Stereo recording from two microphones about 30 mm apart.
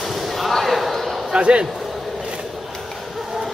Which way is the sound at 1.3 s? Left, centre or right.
Right.